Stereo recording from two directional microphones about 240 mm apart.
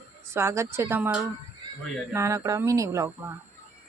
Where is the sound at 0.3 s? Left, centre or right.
Centre.